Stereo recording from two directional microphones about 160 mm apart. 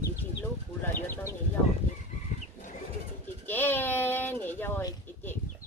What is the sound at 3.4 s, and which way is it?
Speech, 10° left (ahead or behind).